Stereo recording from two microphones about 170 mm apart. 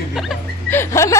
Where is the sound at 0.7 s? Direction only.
15° left (ahead or behind).